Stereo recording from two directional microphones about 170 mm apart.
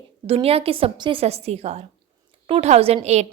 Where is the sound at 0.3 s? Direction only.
35° right (ahead or behind).